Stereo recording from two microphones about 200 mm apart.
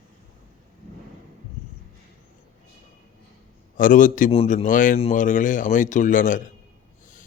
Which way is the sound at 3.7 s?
40° left (ahead or behind).